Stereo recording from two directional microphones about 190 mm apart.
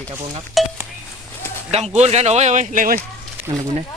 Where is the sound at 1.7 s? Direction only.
35° right (ahead or behind).